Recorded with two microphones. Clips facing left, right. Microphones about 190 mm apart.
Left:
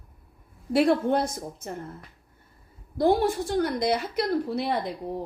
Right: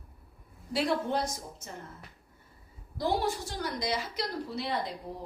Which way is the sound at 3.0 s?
55° left (ahead or behind).